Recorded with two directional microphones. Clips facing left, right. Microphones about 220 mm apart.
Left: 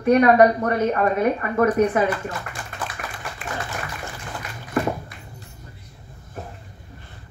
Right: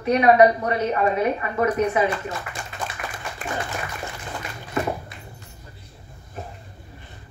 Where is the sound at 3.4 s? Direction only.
40° right (ahead or behind).